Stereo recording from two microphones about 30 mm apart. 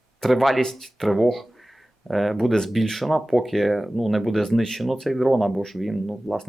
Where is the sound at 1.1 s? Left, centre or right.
Centre.